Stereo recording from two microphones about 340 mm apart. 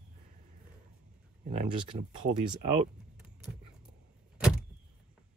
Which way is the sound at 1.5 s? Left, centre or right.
Centre.